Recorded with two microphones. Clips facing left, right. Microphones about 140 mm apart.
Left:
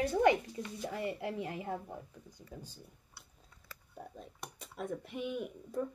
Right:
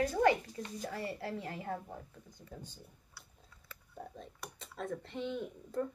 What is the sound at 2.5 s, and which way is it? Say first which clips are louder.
Speech: even; centre (ahead or behind).